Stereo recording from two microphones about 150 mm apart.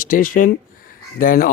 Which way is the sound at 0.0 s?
65° left (ahead or behind).